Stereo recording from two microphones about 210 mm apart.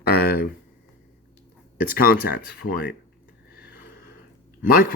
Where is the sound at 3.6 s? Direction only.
45° left (ahead or behind).